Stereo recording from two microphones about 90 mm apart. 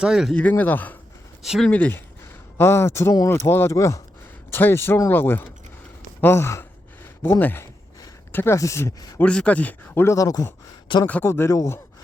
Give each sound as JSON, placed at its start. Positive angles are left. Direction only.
{"t": 0.0, "sound": "speech", "side_deg": -5}
{"t": 0.3, "sound": "speech", "side_deg": 20}
{"t": 1.4, "sound": "speech", "side_deg": 0}
{"t": 1.7, "sound": "speech", "side_deg": 15}
{"t": 2.6, "sound": "speech", "side_deg": 25}
{"t": 8.5, "sound": "speech", "side_deg": 35}
{"t": 9.1, "sound": "speech", "side_deg": 10}
{"t": 10.0, "sound": "speech", "side_deg": 35}
{"t": 11.0, "sound": "speech", "side_deg": 25}